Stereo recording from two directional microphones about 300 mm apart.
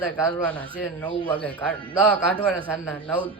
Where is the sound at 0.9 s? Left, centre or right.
Centre.